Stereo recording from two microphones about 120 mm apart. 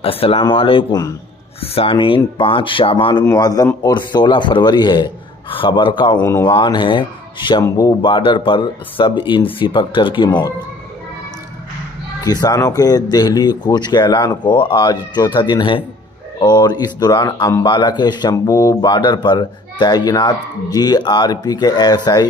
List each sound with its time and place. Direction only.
0.0 s speech: 50° left (ahead or behind)
3.3 s speech: 30° left (ahead or behind)
6.1 s speech: 15° left (ahead or behind)
6.4 s speech: 40° left (ahead or behind)
7.6 s speech: 30° left (ahead or behind)
8.0 s speech: 45° left (ahead or behind)
12.2 s speech: 30° left (ahead or behind)